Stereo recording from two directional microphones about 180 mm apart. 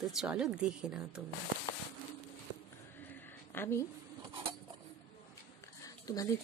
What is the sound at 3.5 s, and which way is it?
Speech, 15° left (ahead or behind).